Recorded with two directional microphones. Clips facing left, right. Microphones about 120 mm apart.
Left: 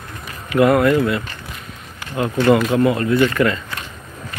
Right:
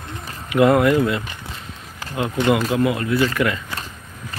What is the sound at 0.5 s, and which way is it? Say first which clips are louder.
Speech: left 1 dB; 20° right (ahead or behind).